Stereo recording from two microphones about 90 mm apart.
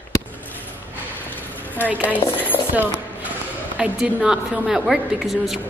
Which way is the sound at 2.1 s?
20° left (ahead or behind).